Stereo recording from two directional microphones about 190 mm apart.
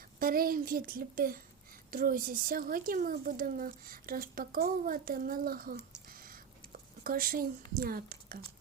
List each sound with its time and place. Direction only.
0.2 s a woman's voice: 50° right (ahead or behind)